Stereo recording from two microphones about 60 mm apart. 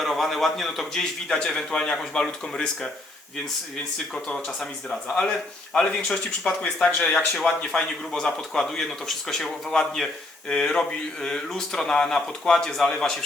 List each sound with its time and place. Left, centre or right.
0.0 s a man's voice: centre
4.4 s a man's voice: centre